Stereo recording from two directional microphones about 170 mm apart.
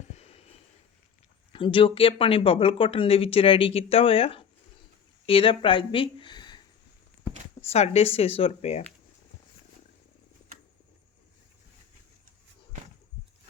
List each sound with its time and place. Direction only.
0.1 s a sound: 40° left (ahead or behind)
1.5 s speech: 30° left (ahead or behind)
7.6 s speech: 35° left (ahead or behind)